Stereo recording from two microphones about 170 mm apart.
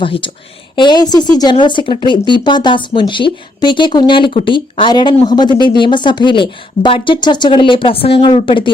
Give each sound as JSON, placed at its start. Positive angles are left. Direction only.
{"t": 0.0, "sound": "speech", "side_deg": 30}